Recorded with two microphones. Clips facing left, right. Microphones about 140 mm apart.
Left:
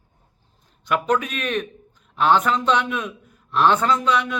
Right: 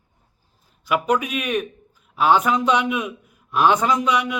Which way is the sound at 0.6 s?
5° right (ahead or behind).